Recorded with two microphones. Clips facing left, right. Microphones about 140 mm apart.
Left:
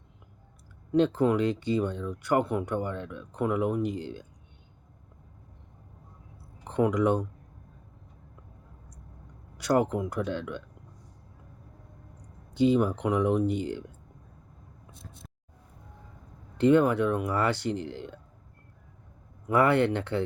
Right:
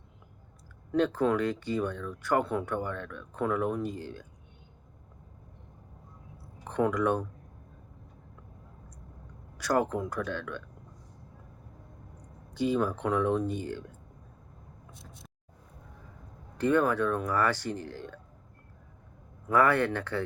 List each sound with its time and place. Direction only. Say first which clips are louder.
0.9 s speech: left 3 dB; 20° left (ahead or behind)
6.7 s speech: left 2 dB; 20° left (ahead or behind)
9.6 s speech: left 3 dB; 20° left (ahead or behind)
12.5 s speech: left 5 dB; 20° left (ahead or behind)
16.6 s speech: left 4 dB; 20° left (ahead or behind)
19.5 s speech: left 2 dB; 20° left (ahead or behind)